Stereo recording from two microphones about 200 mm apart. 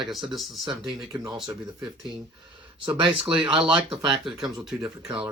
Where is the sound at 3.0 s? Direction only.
25° right (ahead or behind).